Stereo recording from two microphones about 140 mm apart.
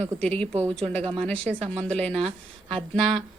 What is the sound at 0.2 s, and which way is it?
Speech, 5° left (ahead or behind).